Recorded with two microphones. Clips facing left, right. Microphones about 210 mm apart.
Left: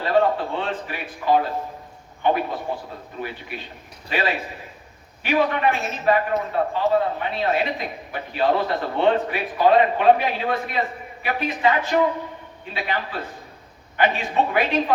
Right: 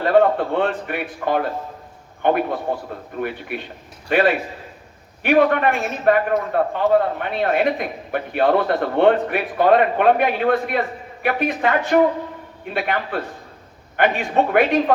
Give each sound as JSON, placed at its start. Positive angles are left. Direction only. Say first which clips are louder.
{"t": 0.0, "sound": "a man's voice", "louder": "right 4 dB", "side_deg": -55}